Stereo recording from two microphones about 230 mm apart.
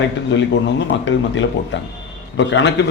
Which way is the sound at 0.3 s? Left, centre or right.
Left.